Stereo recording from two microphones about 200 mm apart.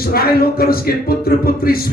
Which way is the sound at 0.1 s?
50° left (ahead or behind).